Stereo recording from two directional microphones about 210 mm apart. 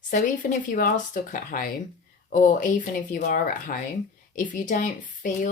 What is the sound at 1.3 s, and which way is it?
Speech, 40° left (ahead or behind).